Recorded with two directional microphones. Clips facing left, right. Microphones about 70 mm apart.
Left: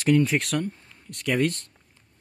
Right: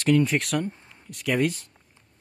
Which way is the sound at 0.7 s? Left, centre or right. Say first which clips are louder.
Even; right.